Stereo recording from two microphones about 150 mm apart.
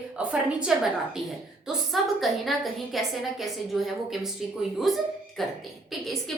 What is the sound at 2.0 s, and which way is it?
A woman's voice, centre (ahead or behind).